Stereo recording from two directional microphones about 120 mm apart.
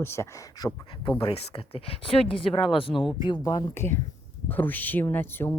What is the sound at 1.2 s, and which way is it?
Speech, 50° left (ahead or behind).